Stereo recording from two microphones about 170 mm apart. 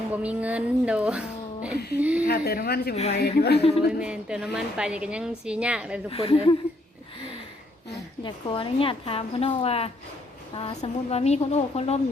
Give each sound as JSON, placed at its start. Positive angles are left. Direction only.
{"t": 0.2, "sound": "speech", "side_deg": -10}
{"t": 2.2, "sound": "speech", "side_deg": 65}
{"t": 2.9, "sound": "a woman's voice", "side_deg": 40}
{"t": 3.2, "sound": "speech", "side_deg": 70}
{"t": 4.0, "sound": "a woman's voice", "side_deg": -5}
{"t": 6.1, "sound": "a woman's voice", "side_deg": 35}
{"t": 8.2, "sound": "a woman's voice", "side_deg": 30}